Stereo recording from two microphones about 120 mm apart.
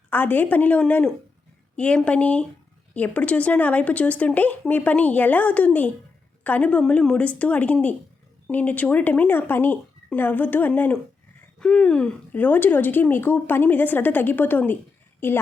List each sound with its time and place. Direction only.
0.1 s a woman's voice: 15° left (ahead or behind)